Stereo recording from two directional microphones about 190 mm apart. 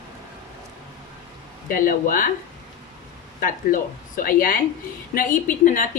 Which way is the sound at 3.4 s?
45° left (ahead or behind).